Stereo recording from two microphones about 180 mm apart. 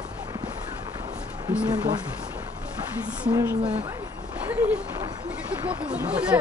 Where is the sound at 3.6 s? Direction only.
35° right (ahead or behind).